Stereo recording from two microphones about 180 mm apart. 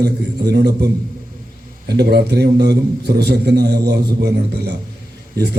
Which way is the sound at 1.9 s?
65° right (ahead or behind).